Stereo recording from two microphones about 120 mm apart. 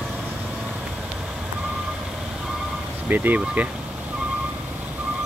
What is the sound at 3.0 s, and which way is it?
Speech, 15° right (ahead or behind).